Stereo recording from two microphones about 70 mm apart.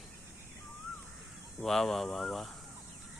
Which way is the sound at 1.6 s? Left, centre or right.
Centre.